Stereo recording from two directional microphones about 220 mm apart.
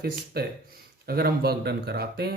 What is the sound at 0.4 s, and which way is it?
Speech, 45° right (ahead or behind).